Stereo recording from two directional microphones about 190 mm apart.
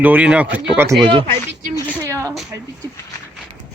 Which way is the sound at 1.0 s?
25° right (ahead or behind).